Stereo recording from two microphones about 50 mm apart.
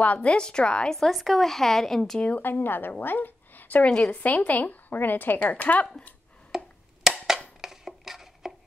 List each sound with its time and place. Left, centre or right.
0.0 s a woman's voice: left
0.9 s a woman's voice: centre
2.4 s a woman's voice: left
6.5 s wood block: centre
7.6 s a sound: centre